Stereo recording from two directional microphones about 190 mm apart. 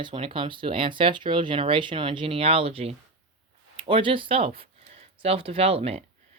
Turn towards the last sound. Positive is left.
turn(degrees=-35)  # may be behind; listen again after turning